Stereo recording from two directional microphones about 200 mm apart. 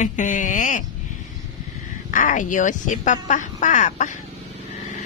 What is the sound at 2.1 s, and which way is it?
Speech, 40° left (ahead or behind).